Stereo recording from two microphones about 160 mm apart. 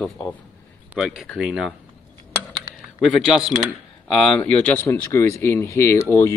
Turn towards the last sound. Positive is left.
turn(degrees=15)  # may be behind; listen again after turning